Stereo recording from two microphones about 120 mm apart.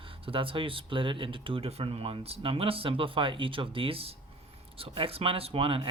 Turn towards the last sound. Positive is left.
turn(degrees=-50)  # may be behind; listen again after turning